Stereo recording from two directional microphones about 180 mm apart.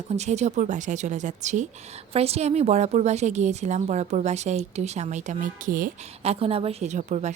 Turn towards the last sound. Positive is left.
turn(degrees=-40)  # may be behind; listen again after turning